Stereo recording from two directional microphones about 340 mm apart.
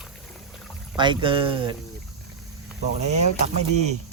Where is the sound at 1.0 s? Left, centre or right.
Centre.